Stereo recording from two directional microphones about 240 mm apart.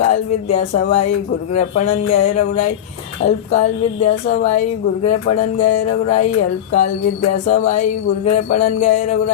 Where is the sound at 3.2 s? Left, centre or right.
Left.